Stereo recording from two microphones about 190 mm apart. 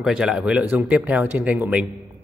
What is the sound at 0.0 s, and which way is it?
Speech, 5° right (ahead or behind).